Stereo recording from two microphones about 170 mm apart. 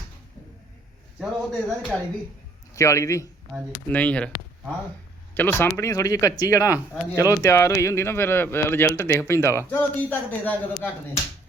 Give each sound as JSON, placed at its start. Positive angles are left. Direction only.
{"t": 1.2, "sound": "speech", "side_deg": -5}
{"t": 2.7, "sound": "speech", "side_deg": 20}
{"t": 3.9, "sound": "speech", "side_deg": 5}
{"t": 5.3, "sound": "speech", "side_deg": 10}